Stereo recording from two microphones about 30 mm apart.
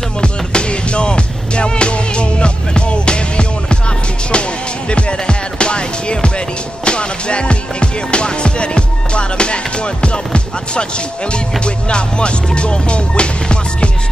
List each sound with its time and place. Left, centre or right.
0.2 s music: left
10.0 s speech: left
11.3 s music: left